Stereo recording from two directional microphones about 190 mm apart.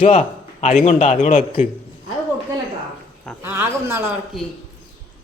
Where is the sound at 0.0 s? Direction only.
35° left (ahead or behind).